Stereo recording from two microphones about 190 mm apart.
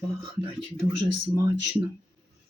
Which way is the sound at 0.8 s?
20° right (ahead or behind).